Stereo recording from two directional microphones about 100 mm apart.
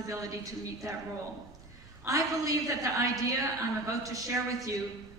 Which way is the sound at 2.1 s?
35° right (ahead or behind).